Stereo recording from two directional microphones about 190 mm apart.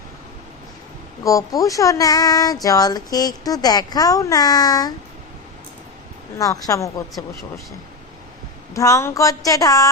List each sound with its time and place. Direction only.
1.2 s speech: 15° left (ahead or behind)
6.4 s speech: 15° left (ahead or behind)
8.7 s speech: 15° left (ahead or behind)